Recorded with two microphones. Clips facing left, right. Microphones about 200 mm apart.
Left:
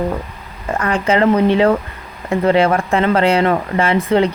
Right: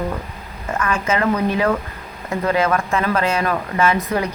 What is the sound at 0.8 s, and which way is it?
Speech, 35° left (ahead or behind).